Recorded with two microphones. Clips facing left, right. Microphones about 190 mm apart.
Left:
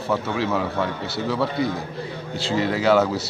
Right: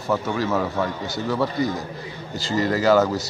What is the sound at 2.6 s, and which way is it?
Speech, centre (ahead or behind).